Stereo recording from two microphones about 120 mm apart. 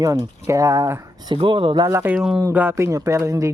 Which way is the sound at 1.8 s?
25° right (ahead or behind).